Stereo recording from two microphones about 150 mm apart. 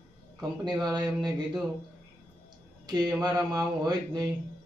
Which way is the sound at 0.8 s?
25° right (ahead or behind).